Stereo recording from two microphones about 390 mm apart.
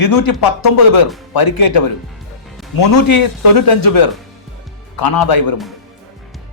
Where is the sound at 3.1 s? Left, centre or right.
Left.